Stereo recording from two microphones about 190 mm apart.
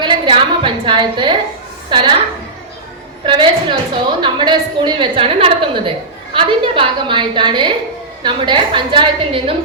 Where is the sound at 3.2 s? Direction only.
25° right (ahead or behind).